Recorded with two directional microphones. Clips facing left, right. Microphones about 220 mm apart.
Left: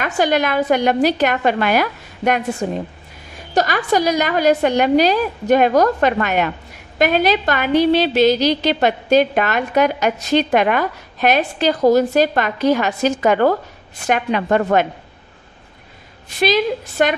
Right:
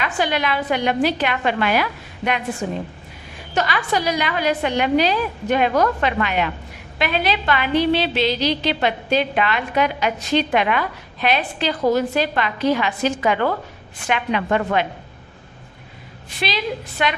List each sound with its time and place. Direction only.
0.0 s a woman's voice: 45° left (ahead or behind)
3.5 s a woman's voice: 45° left (ahead or behind)
16.3 s a woman's voice: 45° left (ahead or behind)